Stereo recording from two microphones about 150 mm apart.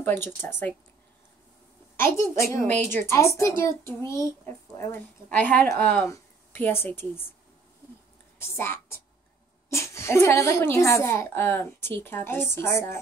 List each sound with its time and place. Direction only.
0.0 s a child's voice: 15° left (ahead or behind)
2.0 s a woman's voice: 15° left (ahead or behind)
8.4 s a woman's voice: 15° left (ahead or behind)